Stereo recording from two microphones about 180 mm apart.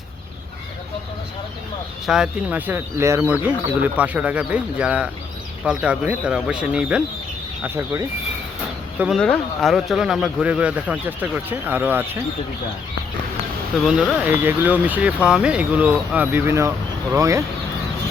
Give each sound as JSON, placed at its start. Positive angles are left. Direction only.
{"t": 2.0, "sound": "speech", "side_deg": -5}
{"t": 9.0, "sound": "speech", "side_deg": 0}
{"t": 13.8, "sound": "speech", "side_deg": 0}